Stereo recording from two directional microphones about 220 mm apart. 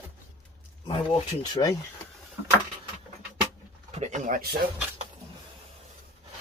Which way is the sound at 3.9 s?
35° right (ahead or behind).